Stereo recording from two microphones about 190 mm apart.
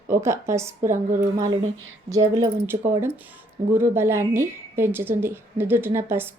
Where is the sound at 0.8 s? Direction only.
40° right (ahead or behind).